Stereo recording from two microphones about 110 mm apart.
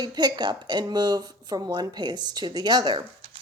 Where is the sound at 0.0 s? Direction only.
40° right (ahead or behind).